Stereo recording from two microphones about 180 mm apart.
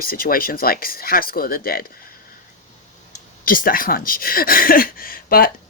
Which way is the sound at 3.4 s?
50° left (ahead or behind).